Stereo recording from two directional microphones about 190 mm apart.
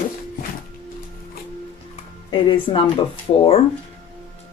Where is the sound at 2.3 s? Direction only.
25° left (ahead or behind).